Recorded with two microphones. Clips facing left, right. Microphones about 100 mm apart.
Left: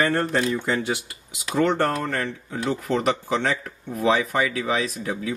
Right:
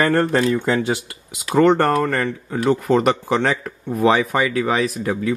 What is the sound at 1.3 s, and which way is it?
Speech, 60° right (ahead or behind).